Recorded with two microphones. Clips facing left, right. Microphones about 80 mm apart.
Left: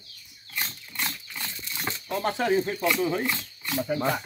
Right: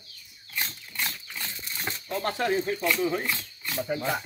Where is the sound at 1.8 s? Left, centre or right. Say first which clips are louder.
Left 2 dB; centre.